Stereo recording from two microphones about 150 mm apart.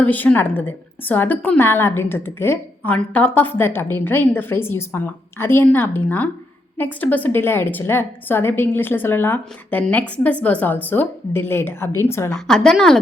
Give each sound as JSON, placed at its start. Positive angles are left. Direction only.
{"t": 0.0, "sound": "a woman's voice", "side_deg": 10}
{"t": 12.3, "sound": "a woman's voice", "side_deg": 5}